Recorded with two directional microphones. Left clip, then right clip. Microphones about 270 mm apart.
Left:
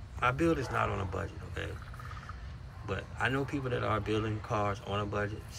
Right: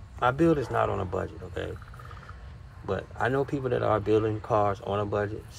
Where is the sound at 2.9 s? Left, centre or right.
Centre.